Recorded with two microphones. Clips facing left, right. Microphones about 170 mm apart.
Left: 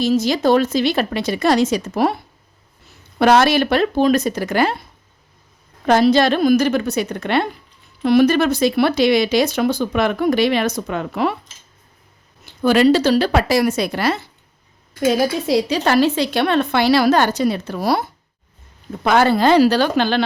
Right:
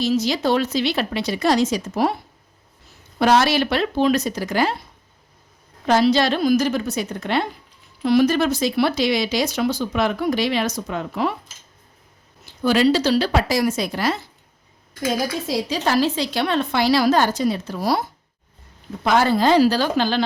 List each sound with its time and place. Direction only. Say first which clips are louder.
0.0 s speech: left 4 dB; 50° left (ahead or behind)
3.2 s speech: left 3 dB; 60° left (ahead or behind)
5.8 s speech: left 3 dB; 55° left (ahead or behind)
12.6 s speech: left 4 dB; 55° left (ahead or behind)
15.4 s speech: left 5 dB; 65° left (ahead or behind)
19.0 s speech: left 3 dB; 60° left (ahead or behind)